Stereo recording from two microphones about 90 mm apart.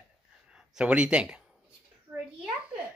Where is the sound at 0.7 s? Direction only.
10° right (ahead or behind).